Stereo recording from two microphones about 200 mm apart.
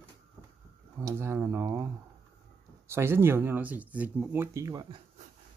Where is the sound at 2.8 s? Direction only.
10° right (ahead or behind).